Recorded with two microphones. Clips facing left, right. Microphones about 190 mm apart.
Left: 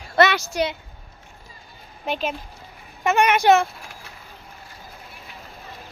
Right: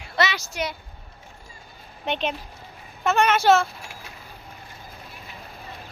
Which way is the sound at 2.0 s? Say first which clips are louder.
Even; 5° left (ahead or behind).